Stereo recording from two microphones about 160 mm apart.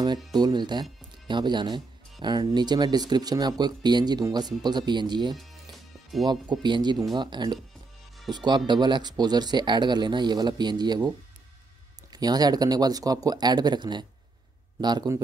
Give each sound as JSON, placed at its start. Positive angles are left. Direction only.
{"t": 0.0, "sound": "speech", "side_deg": -25}
{"t": 6.5, "sound": "speech", "side_deg": -25}
{"t": 12.1, "sound": "speech", "side_deg": -25}